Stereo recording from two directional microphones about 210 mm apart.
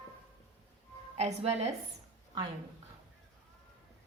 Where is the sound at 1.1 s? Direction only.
30° right (ahead or behind).